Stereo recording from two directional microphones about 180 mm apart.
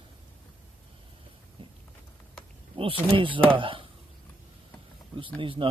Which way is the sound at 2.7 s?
30° right (ahead or behind).